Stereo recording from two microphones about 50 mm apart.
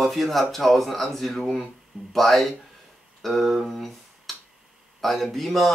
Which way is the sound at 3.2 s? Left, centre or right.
Centre.